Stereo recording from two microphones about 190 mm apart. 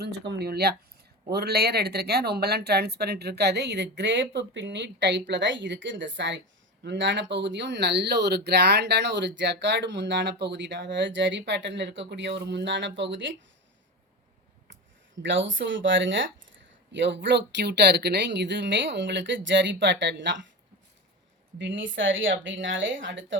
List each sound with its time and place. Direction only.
0.0 s speech: 60° right (ahead or behind)
15.2 s speech: 75° right (ahead or behind)
21.6 s speech: 75° right (ahead or behind)